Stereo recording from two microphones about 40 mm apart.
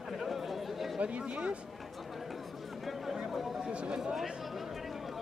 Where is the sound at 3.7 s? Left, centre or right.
Right.